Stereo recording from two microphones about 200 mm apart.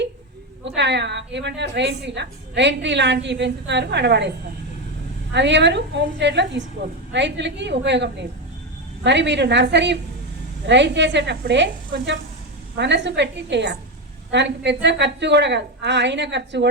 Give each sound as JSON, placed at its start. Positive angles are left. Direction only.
{"t": 0.8, "sound": "a woman's voice", "side_deg": -60}
{"t": 5.3, "sound": "a woman's voice", "side_deg": -60}